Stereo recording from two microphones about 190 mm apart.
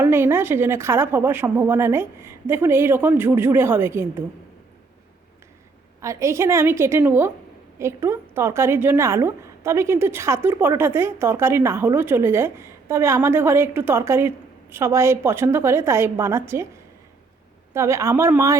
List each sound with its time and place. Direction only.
0.0 s a woman's voice: 15° right (ahead or behind)
6.0 s a woman's voice: 15° right (ahead or behind)
17.7 s a woman's voice: 15° right (ahead or behind)